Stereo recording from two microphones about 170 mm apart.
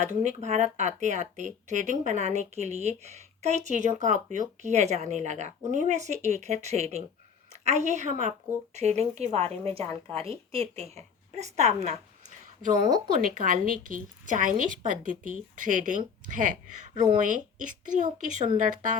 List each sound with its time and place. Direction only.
0.0 s a woman's voice: 45° right (ahead or behind)
13.1 s speech: 55° right (ahead or behind)